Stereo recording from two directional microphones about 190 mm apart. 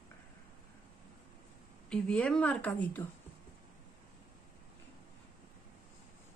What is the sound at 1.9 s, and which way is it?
Speech, 5° left (ahead or behind).